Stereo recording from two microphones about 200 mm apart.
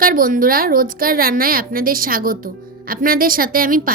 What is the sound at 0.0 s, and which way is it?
A woman's voice, 45° right (ahead or behind).